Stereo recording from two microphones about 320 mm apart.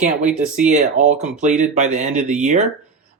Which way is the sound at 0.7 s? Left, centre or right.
Right.